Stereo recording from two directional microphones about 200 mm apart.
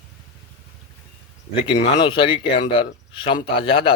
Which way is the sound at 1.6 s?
25° left (ahead or behind).